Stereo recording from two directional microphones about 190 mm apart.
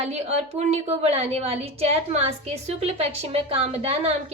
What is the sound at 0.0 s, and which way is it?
A woman's voice, 35° right (ahead or behind).